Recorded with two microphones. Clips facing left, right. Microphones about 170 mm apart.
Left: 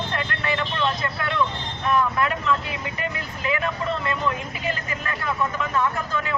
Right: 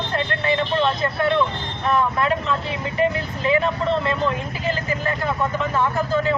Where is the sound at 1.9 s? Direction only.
30° right (ahead or behind).